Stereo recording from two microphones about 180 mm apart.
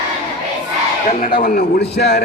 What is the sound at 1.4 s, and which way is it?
Speech, 60° left (ahead or behind).